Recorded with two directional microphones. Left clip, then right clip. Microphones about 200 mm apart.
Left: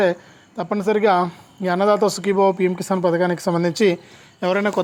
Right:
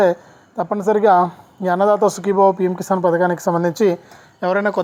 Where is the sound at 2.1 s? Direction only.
15° left (ahead or behind).